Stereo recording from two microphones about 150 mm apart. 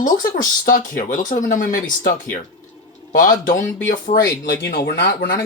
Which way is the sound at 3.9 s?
75° left (ahead or behind).